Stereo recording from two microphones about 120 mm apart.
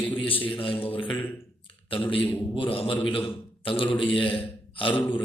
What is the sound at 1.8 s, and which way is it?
A man's voice, 50° left (ahead or behind).